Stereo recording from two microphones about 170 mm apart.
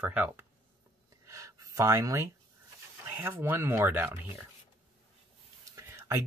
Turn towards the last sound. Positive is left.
turn(degrees=-15)  # may be behind; listen again after turning